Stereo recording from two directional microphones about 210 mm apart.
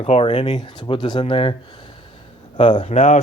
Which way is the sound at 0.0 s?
30° left (ahead or behind).